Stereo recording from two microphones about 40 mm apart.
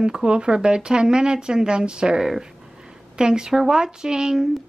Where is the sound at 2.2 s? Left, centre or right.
Centre.